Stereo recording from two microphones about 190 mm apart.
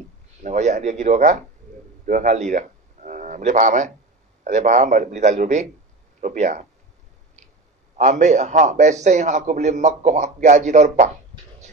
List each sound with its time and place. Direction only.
0.4 s a man's voice: 40° right (ahead or behind)
8.0 s a man's voice: 40° right (ahead or behind)